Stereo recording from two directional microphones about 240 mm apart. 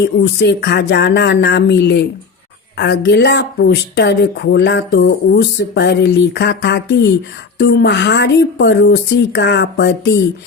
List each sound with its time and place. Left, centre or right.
0.0 s a woman's voice: left